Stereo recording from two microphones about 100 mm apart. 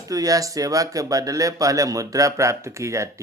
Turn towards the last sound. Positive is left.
turn(degrees=-30)  # may be behind; listen again after turning